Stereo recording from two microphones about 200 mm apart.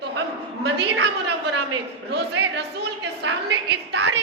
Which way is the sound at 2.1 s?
55° right (ahead or behind).